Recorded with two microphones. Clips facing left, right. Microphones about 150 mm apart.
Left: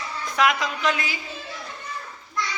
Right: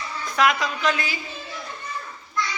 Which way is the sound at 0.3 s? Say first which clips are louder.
Right 1 dB; 20° left (ahead or behind).